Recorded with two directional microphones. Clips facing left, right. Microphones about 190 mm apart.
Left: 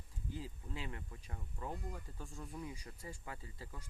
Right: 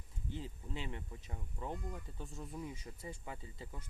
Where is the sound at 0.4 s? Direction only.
20° right (ahead or behind).